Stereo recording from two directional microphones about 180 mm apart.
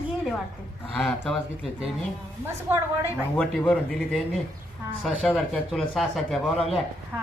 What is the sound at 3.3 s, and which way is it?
Speech, 5° left (ahead or behind).